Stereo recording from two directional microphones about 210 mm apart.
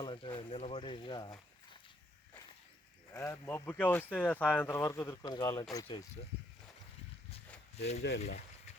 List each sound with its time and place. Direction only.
0.0 s speech: 25° left (ahead or behind)
3.1 s speech: 15° left (ahead or behind)
7.8 s speech: 30° left (ahead or behind)